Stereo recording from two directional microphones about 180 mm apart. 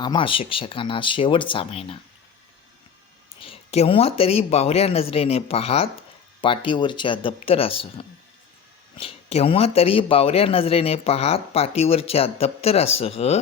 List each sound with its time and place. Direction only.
0.0 s speech: 25° left (ahead or behind)
3.4 s a man's voice: 35° left (ahead or behind)